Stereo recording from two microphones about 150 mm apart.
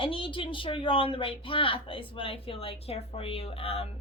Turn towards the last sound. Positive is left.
turn(degrees=40)  # may be behind; listen again after turning